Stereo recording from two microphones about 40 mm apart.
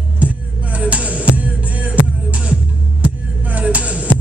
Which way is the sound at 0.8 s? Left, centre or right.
Right.